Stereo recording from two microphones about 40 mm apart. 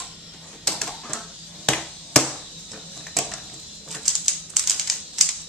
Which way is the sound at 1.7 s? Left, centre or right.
Left.